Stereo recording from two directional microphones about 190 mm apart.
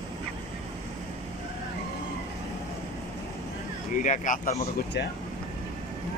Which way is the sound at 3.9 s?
40° left (ahead or behind).